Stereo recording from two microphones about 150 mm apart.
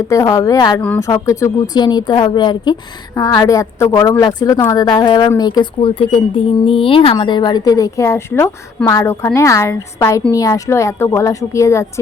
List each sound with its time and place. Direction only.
0.1 s speech: 20° left (ahead or behind)